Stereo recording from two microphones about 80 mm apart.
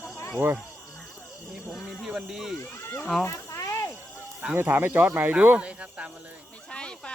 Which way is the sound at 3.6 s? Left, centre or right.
Left.